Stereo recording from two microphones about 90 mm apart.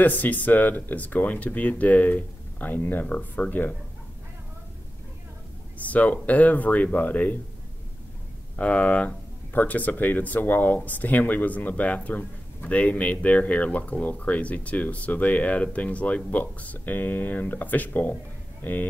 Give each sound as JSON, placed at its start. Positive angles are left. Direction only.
{"t": 0.0, "sound": "speech", "side_deg": 20}
{"t": 5.9, "sound": "speech", "side_deg": 15}
{"t": 8.5, "sound": "speech", "side_deg": 15}